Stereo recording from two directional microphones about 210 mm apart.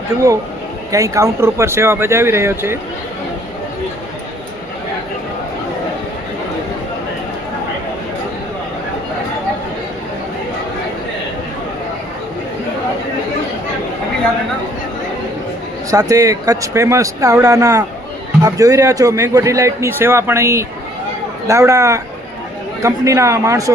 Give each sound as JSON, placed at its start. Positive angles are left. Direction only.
{"t": 0.9, "sound": "a man's voice", "side_deg": -15}
{"t": 15.9, "sound": "a man's voice", "side_deg": -15}